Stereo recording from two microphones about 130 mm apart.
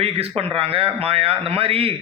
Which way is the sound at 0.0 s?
50° right (ahead or behind).